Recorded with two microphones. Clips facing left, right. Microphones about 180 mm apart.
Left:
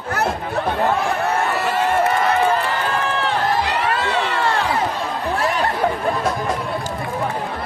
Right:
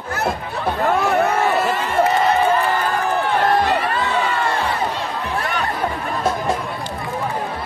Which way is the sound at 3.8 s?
75° left (ahead or behind).